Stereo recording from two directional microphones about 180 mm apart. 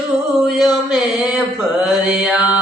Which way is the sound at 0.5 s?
Centre (ahead or behind).